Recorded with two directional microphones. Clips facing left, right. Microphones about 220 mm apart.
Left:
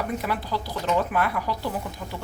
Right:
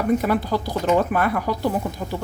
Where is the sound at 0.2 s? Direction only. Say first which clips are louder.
Right 7 dB; 50° right (ahead or behind).